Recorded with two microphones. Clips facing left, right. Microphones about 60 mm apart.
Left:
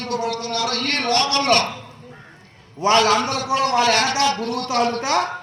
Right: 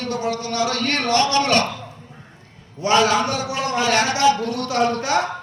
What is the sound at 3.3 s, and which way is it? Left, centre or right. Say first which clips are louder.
A man's voice: left 4 dB; right.